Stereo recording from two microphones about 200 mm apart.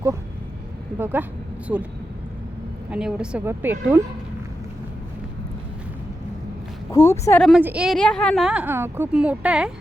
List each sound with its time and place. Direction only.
0.9 s speech: 10° right (ahead or behind)
2.9 s a woman's voice: 5° right (ahead or behind)
6.9 s speech: 15° left (ahead or behind)
7.4 s a woman's voice: 5° right (ahead or behind)